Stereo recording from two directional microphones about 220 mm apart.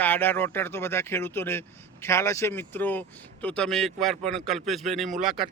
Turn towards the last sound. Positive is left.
turn(degrees=0)  # may be behind; listen again after turning